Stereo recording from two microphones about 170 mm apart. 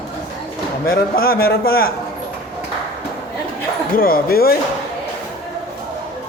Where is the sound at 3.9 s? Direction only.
60° left (ahead or behind).